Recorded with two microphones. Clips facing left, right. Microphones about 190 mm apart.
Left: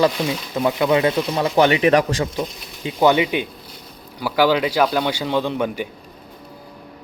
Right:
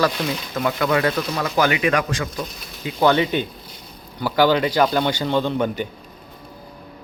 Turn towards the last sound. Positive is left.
turn(degrees=5)  # may be behind; listen again after turning